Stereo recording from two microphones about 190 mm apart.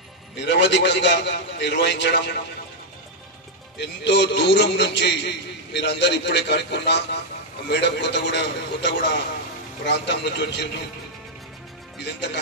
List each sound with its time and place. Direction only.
0.4 s a man's voice: 65° left (ahead or behind)
3.7 s a man's voice: 65° left (ahead or behind)
12.0 s a man's voice: 65° left (ahead or behind)